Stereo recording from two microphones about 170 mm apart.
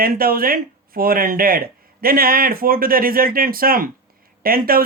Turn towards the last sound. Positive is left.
turn(degrees=-60)  # may be behind; listen again after turning